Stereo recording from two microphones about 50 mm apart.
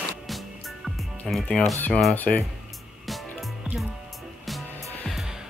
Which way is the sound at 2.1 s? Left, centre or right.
Left.